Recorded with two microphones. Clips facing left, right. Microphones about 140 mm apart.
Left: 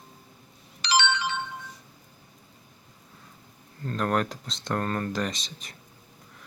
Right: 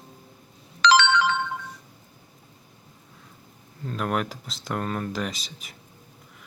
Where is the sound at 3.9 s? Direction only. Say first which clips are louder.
Left 1 dB; 5° right (ahead or behind).